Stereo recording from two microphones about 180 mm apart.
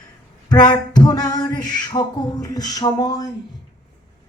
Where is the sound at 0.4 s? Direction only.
25° left (ahead or behind).